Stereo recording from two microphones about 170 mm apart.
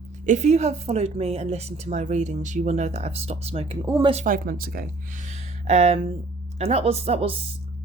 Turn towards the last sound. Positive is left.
turn(degrees=-35)  # may be behind; listen again after turning